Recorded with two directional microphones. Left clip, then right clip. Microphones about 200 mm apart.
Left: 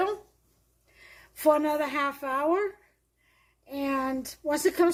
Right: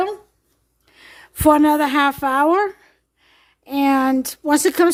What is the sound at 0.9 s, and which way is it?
A woman's voice, 60° right (ahead or behind).